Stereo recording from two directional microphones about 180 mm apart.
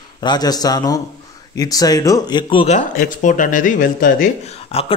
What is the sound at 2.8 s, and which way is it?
Speech, 45° left (ahead or behind).